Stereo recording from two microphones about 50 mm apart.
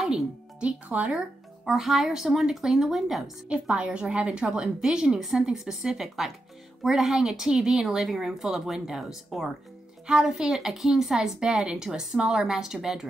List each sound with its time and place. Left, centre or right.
0.6 s speech: right
1.1 s speech: centre
3.4 s speech: right